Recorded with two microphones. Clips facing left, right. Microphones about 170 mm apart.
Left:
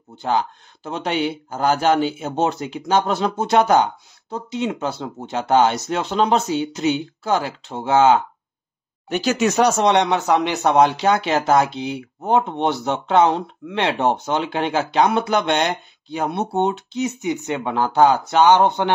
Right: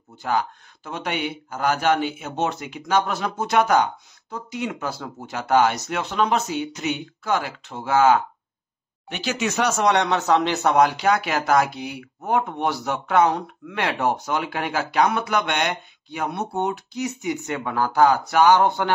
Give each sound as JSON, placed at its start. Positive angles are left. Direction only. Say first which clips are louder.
{"t": 0.2, "sound": "speech", "louder": "left 3 dB", "side_deg": 30}
{"t": 9.1, "sound": "speech", "louder": "left 7 dB", "side_deg": 45}
{"t": 9.7, "sound": "speech", "louder": "left 3 dB", "side_deg": 25}